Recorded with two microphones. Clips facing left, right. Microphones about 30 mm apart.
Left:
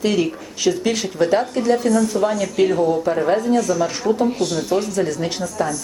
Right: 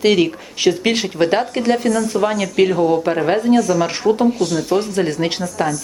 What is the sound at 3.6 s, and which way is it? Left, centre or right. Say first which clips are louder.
Speech: right 3 dB; right.